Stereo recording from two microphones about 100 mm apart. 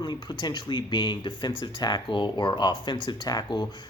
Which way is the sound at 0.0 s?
45° left (ahead or behind).